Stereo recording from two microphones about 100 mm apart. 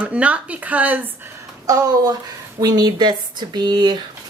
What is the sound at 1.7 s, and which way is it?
Speech, 40° right (ahead or behind).